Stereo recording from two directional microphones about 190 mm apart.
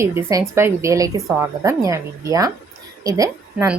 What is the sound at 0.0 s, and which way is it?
A woman's voice, 15° right (ahead or behind).